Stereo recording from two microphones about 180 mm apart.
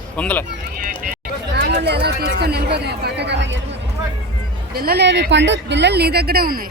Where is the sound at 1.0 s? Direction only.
55° right (ahead or behind); by 3.5 s 80° right.